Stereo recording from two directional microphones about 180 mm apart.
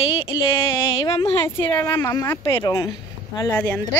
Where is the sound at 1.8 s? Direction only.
10° left (ahead or behind).